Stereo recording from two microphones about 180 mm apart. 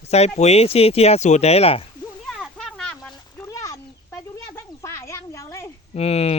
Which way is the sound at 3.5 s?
20° left (ahead or behind).